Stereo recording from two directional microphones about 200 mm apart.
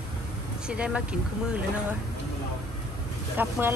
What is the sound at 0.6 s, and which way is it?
Speech, 5° right (ahead or behind).